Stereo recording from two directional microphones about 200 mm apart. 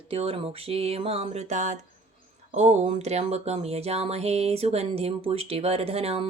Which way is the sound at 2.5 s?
35° right (ahead or behind).